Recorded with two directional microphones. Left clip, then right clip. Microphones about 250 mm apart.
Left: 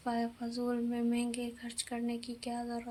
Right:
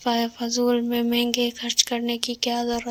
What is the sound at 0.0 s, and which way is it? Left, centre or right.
Speech, right.